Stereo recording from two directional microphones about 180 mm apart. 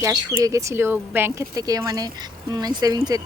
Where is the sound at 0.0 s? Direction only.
20° right (ahead or behind).